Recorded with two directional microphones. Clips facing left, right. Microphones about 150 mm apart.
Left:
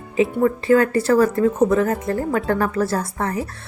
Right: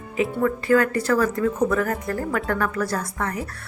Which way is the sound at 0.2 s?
25° left (ahead or behind).